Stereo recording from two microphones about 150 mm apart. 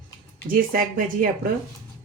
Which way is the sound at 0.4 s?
70° right (ahead or behind).